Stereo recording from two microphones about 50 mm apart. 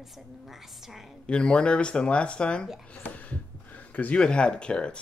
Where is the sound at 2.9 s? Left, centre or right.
Left.